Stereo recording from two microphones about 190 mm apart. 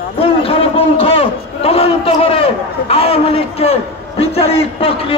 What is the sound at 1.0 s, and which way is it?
A man's voice, 30° left (ahead or behind).